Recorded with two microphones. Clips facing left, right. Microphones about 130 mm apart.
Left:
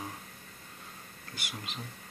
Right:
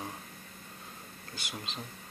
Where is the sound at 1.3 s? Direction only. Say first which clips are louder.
Even; 25° right (ahead or behind).